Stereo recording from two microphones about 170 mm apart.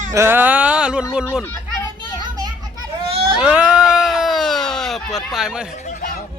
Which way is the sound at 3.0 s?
35° right (ahead or behind).